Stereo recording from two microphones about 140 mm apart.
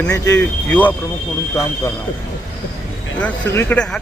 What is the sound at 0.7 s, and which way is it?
Speech, 10° left (ahead or behind).